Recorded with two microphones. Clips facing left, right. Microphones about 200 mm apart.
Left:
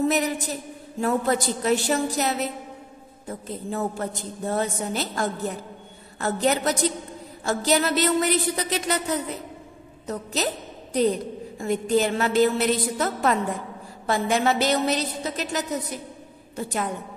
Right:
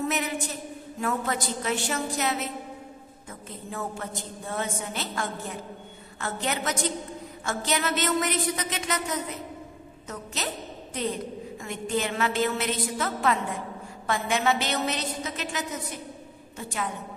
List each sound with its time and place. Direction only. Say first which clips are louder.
0.0 s a woman's voice: left 6 dB; 35° left (ahead or behind)